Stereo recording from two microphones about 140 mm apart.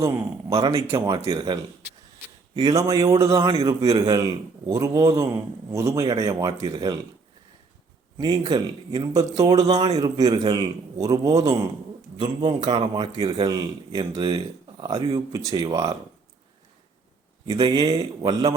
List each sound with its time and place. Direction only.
0.5 s a man's voice: 25° right (ahead or behind)
2.6 s a man's voice: 25° right (ahead or behind)
8.2 s a man's voice: 30° right (ahead or behind)
17.4 s speech: 30° right (ahead or behind)